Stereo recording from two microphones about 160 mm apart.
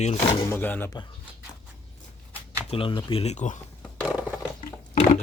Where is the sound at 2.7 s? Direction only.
35° left (ahead or behind).